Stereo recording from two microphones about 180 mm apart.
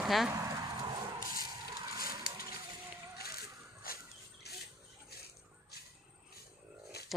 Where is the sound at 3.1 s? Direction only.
60° left (ahead or behind).